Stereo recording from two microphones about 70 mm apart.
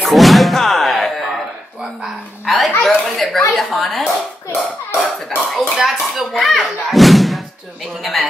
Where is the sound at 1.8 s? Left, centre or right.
Centre.